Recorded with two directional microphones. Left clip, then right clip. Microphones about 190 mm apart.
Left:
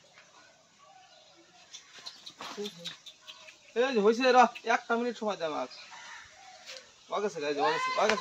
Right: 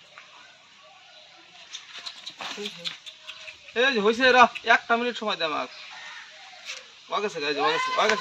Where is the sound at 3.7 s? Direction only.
Centre (ahead or behind).